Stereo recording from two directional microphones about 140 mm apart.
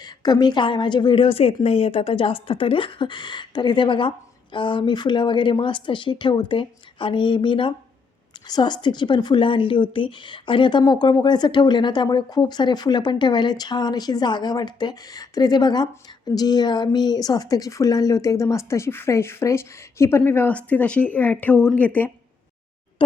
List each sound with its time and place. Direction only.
0.0 s a woman's voice: 30° left (ahead or behind); by 22.1 s 10° left (ahead or behind)
23.0 s speech: 35° left (ahead or behind)